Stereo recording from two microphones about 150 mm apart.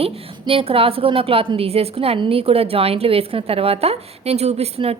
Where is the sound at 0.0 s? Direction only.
40° right (ahead or behind).